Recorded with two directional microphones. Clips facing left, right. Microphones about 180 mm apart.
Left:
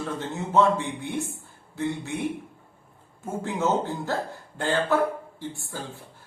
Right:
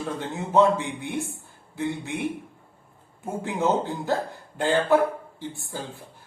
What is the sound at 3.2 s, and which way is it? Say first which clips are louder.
Speech: right 1 dB; 15° right (ahead or behind).